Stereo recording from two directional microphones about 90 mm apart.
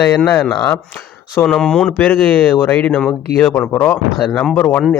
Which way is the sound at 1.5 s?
5° left (ahead or behind).